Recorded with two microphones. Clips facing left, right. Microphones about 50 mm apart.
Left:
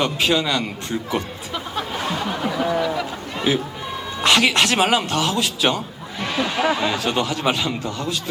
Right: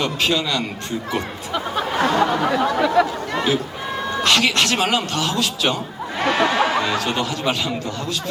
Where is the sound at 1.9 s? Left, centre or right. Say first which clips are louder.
Right 9 dB; right.